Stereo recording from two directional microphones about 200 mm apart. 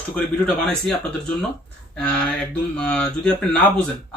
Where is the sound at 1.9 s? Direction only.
5° left (ahead or behind).